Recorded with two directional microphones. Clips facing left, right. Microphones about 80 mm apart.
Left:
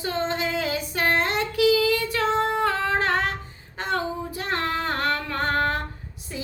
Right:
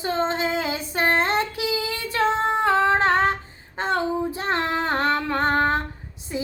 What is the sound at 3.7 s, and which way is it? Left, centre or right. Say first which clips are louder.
Female singing: right 4 dB; right.